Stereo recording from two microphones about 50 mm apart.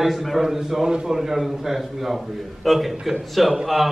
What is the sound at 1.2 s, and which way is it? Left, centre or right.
A man's voice, centre.